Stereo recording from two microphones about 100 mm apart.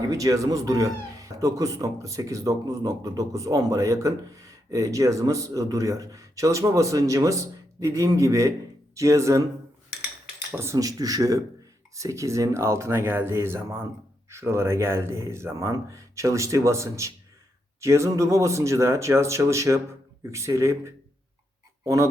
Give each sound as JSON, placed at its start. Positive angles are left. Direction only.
{"t": 0.1, "sound": "speech", "side_deg": -35}
{"t": 10.5, "sound": "speech", "side_deg": -25}
{"t": 10.8, "sound": "speech", "side_deg": -35}